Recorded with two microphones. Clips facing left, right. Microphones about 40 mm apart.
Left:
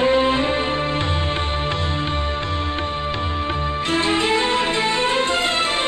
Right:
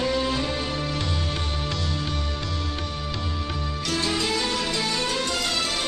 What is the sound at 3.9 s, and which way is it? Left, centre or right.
Music, left.